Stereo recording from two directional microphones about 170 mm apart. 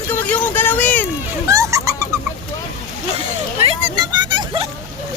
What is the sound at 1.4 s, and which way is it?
Speech, 20° right (ahead or behind).